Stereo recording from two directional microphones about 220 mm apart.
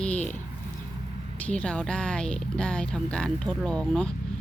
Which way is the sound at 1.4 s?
5° left (ahead or behind).